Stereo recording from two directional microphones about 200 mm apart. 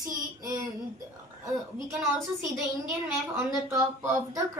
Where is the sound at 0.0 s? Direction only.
15° right (ahead or behind).